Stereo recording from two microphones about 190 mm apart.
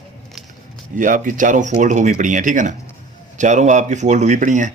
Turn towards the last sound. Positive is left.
turn(degrees=-40)  # may be behind; listen again after turning